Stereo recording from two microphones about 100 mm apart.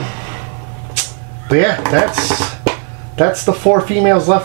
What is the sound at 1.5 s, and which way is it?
Speech, 15° right (ahead or behind).